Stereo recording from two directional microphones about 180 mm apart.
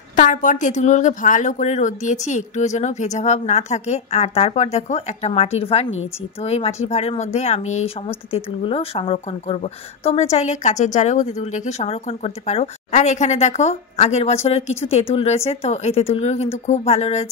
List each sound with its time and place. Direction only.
0.1 s speech: 45° left (ahead or behind)